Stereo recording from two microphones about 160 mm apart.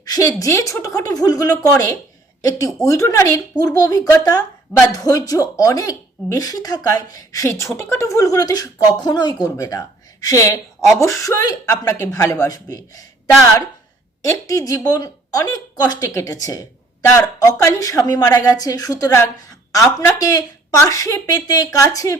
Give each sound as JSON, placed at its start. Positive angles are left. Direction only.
{"t": 0.0, "sound": "a woman's voice", "side_deg": 25}
{"t": 14.3, "sound": "a woman's voice", "side_deg": 20}